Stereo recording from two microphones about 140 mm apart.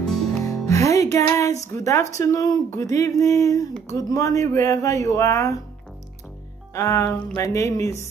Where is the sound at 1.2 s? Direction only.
20° left (ahead or behind).